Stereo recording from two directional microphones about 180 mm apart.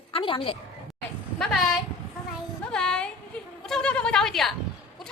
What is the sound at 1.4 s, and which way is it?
Speech, centre (ahead or behind).